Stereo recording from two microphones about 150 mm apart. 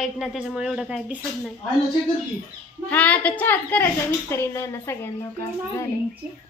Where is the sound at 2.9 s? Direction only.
10° left (ahead or behind).